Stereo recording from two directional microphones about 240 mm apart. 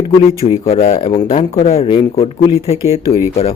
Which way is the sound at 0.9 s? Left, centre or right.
Centre.